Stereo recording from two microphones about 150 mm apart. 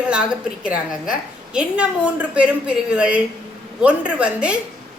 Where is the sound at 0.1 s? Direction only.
5° right (ahead or behind).